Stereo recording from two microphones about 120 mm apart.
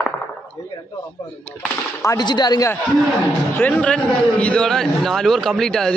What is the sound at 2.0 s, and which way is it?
Speech, 35° left (ahead or behind).